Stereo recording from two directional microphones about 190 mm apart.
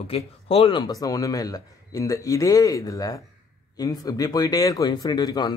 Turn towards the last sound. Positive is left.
turn(degrees=20)  # may be behind; listen again after turning